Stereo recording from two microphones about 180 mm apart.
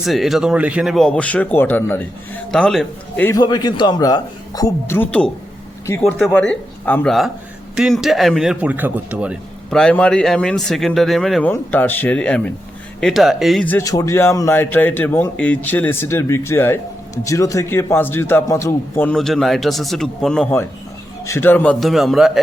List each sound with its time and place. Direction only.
0.0 s speech: centre (ahead or behind)
3.2 s a man's voice: 20° left (ahead or behind); by 9.4 s 10° right (ahead or behind)
9.6 s speech: 5° left (ahead or behind)